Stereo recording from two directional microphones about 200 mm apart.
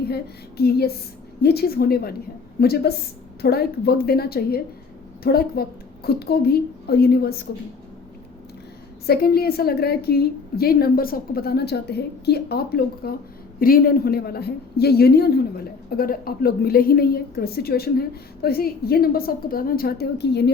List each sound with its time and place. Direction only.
0.1 s a woman's voice: 50° left (ahead or behind)
9.0 s a woman's voice: 50° left (ahead or behind)